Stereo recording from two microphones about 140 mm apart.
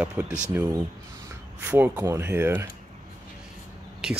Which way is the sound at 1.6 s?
15° right (ahead or behind).